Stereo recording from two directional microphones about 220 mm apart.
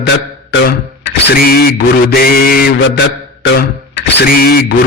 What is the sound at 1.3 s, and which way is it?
Mantra, 45° left (ahead or behind).